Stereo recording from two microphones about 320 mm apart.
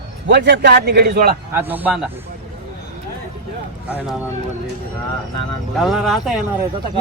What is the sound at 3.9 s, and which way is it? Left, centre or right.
Speech, centre.